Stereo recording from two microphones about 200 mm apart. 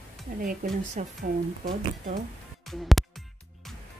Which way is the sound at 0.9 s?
45° right (ahead or behind).